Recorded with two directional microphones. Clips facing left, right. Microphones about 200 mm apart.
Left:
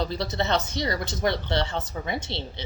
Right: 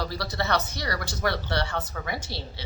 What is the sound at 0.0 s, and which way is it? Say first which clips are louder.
Speech: left 3 dB; 20° left (ahead or behind).